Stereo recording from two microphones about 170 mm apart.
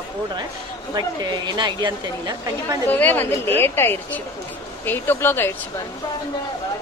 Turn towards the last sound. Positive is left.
turn(degrees=15)  # may be behind; listen again after turning